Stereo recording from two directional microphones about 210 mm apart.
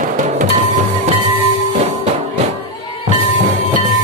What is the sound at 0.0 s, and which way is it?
Music, 40° right (ahead or behind).